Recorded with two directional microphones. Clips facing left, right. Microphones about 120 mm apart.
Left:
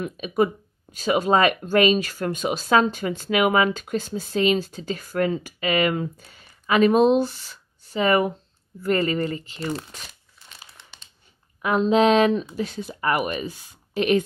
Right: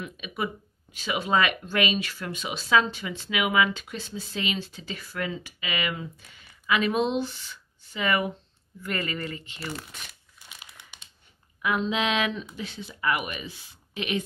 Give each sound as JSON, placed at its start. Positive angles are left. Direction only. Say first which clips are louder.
{"t": 0.0, "sound": "speech", "louder": "left 10 dB", "side_deg": 40}
{"t": 10.7, "sound": "crumpling", "louder": "left 1 dB", "side_deg": -15}
{"t": 11.6, "sound": "speech", "louder": "left 8 dB", "side_deg": 40}